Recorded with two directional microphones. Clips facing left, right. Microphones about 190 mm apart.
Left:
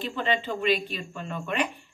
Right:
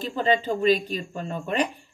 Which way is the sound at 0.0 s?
40° right (ahead or behind).